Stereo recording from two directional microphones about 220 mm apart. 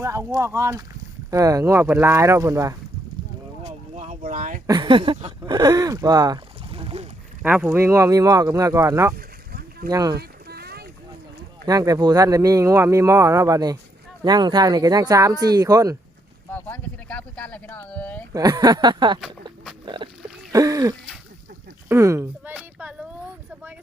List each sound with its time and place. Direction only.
0.0 s speech: 10° right (ahead or behind)
3.6 s a sound: 30° right (ahead or behind)
4.6 s speech: 20° right (ahead or behind)
7.4 s speech: 10° right (ahead or behind)
9.1 s boat: 45° right (ahead or behind)
9.9 s speech: 15° right (ahead or behind)
10.2 s a sound: 45° right (ahead or behind)
11.6 s speech: 15° right (ahead or behind)
16.5 s speech: 10° left (ahead or behind)
18.3 s speech: 15° right (ahead or behind)
19.8 s oink: 20° right (ahead or behind)
20.5 s throat clearing: 15° right (ahead or behind)
21.8 s a sound: 10° right (ahead or behind)